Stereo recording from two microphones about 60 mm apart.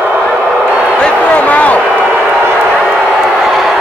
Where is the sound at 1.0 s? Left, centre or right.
Left.